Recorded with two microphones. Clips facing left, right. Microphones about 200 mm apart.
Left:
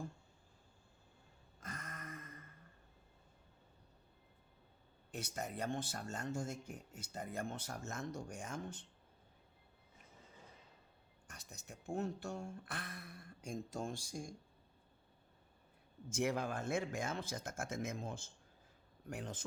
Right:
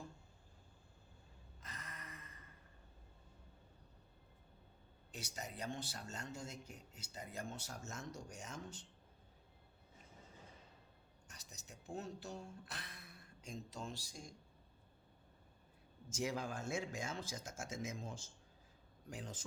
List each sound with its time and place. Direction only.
1.6 s a sound: 50° left (ahead or behind)
5.1 s speech: 55° left (ahead or behind)
11.3 s speech: 55° left (ahead or behind)
16.0 s speech: 60° left (ahead or behind)